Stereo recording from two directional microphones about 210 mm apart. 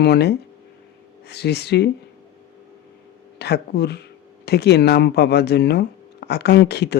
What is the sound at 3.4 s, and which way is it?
Speech, 50° left (ahead or behind).